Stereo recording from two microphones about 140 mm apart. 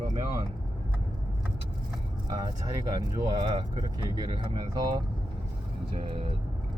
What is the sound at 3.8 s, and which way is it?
Speech, 35° right (ahead or behind).